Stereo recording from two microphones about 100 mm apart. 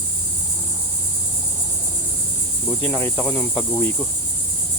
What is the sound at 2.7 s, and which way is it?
Speech, 20° left (ahead or behind).